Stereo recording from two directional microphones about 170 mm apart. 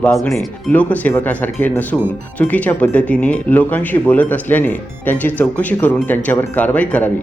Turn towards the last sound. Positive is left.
turn(degrees=10)  # may be behind; listen again after turning